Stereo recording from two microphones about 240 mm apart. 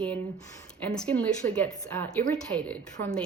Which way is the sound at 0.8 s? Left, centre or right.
Centre.